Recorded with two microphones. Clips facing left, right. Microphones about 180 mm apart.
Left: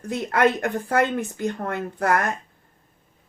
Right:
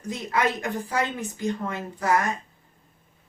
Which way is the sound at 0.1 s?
60° left (ahead or behind).